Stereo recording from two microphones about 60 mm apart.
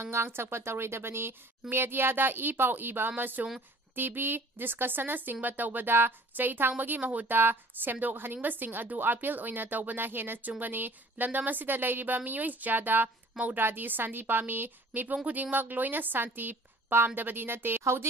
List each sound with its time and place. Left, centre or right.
0.0 s a woman's voice: right